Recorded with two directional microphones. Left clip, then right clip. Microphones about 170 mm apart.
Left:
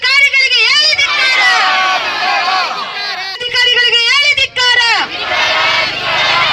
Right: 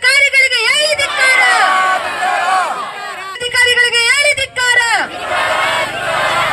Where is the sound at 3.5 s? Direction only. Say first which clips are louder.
Left 1 dB; 65° right (ahead or behind).